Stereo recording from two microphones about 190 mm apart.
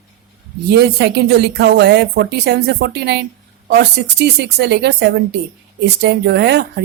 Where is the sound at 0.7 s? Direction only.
60° right (ahead or behind).